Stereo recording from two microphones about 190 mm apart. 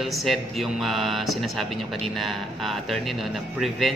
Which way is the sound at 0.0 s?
Centre (ahead or behind).